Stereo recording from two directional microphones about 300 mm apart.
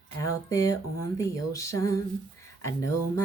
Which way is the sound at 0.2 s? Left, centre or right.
Centre.